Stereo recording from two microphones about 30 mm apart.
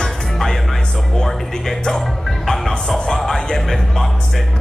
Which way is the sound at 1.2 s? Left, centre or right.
Centre.